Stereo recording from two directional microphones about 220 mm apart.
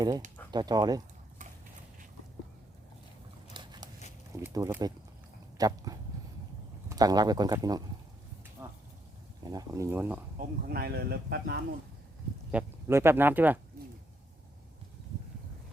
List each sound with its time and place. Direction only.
0.5 s speech: 20° right (ahead or behind)
3.5 s a sound: 20° right (ahead or behind)
4.3 s speech: 15° right (ahead or behind)
8.6 s a sound: 10° right (ahead or behind)
9.5 s speech: 15° right (ahead or behind)
10.3 s speech: 45° right (ahead or behind)
12.5 s speech: 10° right (ahead or behind)